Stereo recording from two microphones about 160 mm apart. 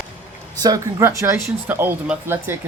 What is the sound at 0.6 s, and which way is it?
Speech, 20° right (ahead or behind).